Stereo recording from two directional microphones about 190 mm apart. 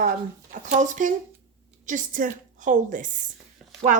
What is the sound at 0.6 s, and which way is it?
A woman's voice, 40° right (ahead or behind).